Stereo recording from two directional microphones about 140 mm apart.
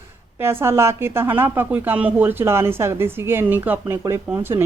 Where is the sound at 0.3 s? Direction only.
15° right (ahead or behind).